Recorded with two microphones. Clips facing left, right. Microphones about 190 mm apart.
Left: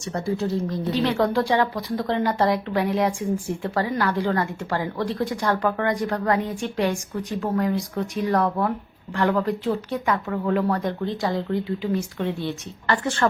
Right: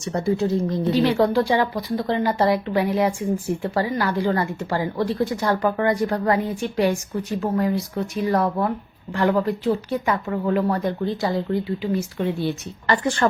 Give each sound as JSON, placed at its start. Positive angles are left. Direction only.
{"t": 0.0, "sound": "a woman's voice", "side_deg": -20}
{"t": 1.0, "sound": "speech", "side_deg": -5}